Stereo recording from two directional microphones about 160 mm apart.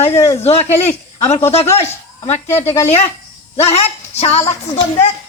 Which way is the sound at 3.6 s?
40° left (ahead or behind).